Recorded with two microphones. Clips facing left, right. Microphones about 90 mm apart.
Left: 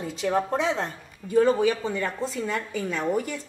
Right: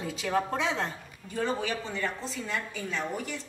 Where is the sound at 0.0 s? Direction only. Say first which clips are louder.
Left 4 dB; 25° left (ahead or behind).